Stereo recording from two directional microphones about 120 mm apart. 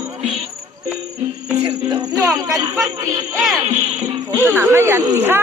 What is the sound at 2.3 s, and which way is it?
Speech, 30° right (ahead or behind).